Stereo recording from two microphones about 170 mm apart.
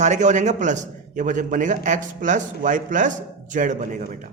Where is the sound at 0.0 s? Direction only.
45° right (ahead or behind).